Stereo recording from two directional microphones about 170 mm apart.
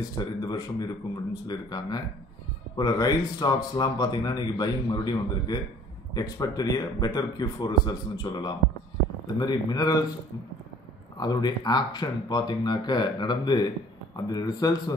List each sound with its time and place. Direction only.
0.2 s speech: 25° left (ahead or behind)
11.1 s speech: 25° left (ahead or behind)